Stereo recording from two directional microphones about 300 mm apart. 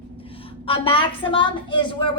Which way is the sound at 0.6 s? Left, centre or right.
Centre.